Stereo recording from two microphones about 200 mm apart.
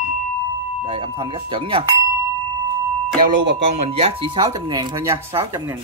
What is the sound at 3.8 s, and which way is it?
Speech, 30° right (ahead or behind).